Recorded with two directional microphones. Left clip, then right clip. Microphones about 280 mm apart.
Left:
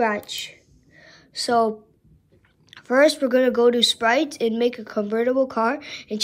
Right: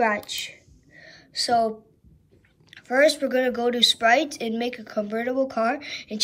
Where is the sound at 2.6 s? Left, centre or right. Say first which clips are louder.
Left 2 dB; centre.